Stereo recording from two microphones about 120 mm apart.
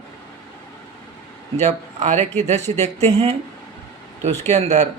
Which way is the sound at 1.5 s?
75° right (ahead or behind).